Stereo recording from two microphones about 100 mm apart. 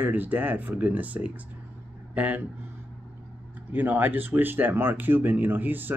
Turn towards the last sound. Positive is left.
turn(degrees=-20)  # may be behind; listen again after turning